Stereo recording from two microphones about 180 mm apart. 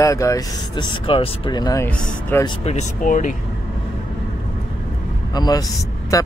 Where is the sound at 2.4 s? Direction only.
35° left (ahead or behind).